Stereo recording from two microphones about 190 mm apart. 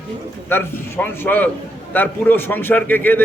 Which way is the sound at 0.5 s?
10° left (ahead or behind).